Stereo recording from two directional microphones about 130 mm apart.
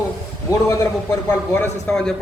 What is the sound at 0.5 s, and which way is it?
A man's voice, 25° left (ahead or behind).